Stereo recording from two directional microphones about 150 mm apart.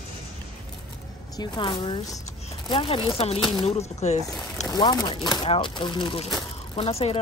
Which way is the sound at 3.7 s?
45° left (ahead or behind).